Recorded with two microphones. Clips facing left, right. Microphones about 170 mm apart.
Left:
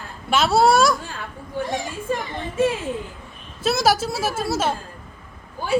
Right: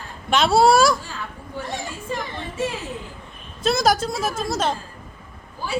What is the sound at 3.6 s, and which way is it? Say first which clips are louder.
A woman's voice: even; 5° left (ahead or behind).